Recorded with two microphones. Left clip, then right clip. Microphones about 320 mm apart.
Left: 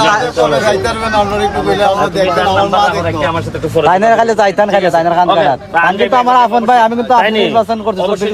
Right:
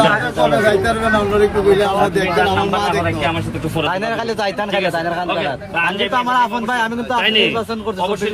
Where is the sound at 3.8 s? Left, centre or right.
Left.